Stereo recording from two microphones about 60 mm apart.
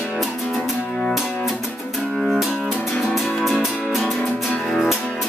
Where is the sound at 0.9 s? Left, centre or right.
Centre.